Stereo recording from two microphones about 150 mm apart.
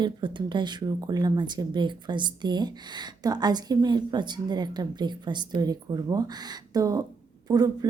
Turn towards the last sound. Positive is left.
turn(degrees=-25)  # may be behind; listen again after turning